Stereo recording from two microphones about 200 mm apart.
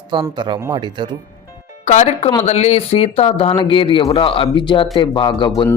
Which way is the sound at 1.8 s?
35° left (ahead or behind).